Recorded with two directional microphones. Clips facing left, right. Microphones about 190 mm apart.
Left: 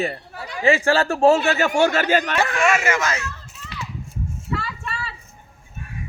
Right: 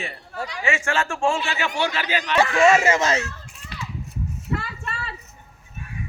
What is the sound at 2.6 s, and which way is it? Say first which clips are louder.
Speech: right 5 dB; 25° right (ahead or behind).